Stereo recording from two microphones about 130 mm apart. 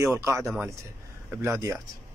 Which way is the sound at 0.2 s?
20° right (ahead or behind).